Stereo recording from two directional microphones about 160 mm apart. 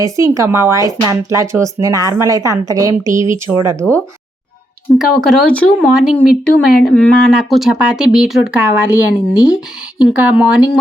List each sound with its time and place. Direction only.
0.0 s speech: 20° right (ahead or behind)
4.9 s speech: centre (ahead or behind)